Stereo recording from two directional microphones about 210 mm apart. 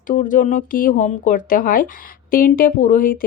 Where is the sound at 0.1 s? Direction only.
40° left (ahead or behind).